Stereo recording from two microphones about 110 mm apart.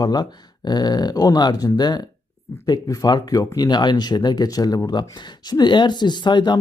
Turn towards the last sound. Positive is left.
turn(degrees=45)  # may be behind; listen again after turning